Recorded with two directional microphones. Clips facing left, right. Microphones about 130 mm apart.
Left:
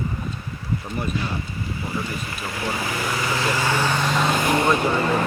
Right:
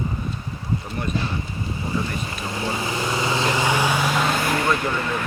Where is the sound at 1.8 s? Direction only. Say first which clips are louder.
Right 3 dB; 25° right (ahead or behind); by 4.4 s 5° right (ahead or behind).